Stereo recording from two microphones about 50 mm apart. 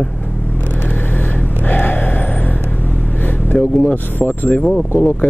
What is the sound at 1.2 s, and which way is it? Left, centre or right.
Vehicle, left.